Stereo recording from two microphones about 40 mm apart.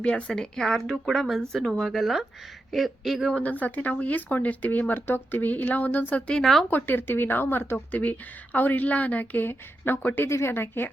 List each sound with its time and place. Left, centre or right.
0.0 s speech: left; by 3.2 s centre
3.3 s speech: left
6.4 s speech: centre
6.7 s speech: left
7.9 s speech: left
9.4 s speech: left